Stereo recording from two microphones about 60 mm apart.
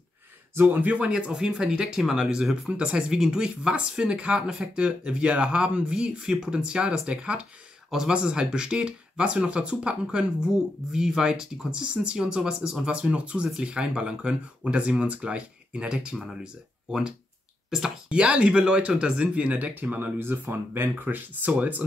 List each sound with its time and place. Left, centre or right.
0.6 s speech: right
7.9 s speech: centre
17.6 s speech: centre; by 21.8 s right